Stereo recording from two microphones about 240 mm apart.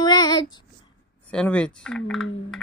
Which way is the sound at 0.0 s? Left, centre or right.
Centre.